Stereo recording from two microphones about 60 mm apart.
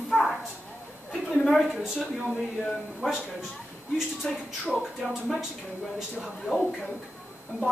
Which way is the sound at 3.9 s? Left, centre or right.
Centre.